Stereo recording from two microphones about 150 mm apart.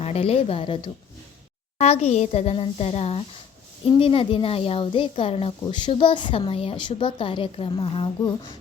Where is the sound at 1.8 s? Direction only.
45° left (ahead or behind).